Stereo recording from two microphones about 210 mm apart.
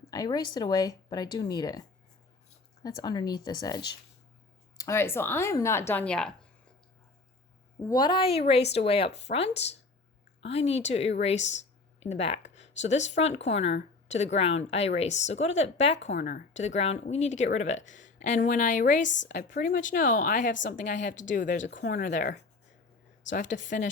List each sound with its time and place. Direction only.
0.1 s speech: 20° left (ahead or behind)
7.9 s speech: 20° left (ahead or behind)
16.0 s speech: 60° left (ahead or behind)
16.2 s speech: 35° left (ahead or behind)
19.0 s speech: 60° left (ahead or behind)
19.4 s speech: 45° left (ahead or behind)
21.8 s speech: 50° left (ahead or behind)
22.1 s speech: 35° left (ahead or behind)